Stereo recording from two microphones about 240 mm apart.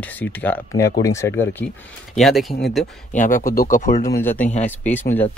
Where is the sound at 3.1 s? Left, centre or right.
Left.